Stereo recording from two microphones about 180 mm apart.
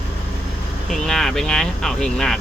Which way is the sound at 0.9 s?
5° left (ahead or behind).